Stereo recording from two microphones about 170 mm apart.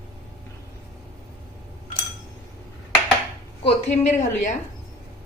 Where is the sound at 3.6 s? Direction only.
40° left (ahead or behind).